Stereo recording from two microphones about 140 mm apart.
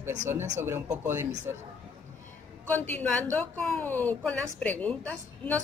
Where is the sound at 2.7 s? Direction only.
10° left (ahead or behind).